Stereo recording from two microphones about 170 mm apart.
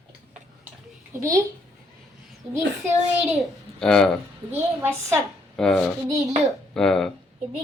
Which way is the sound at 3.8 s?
5° left (ahead or behind).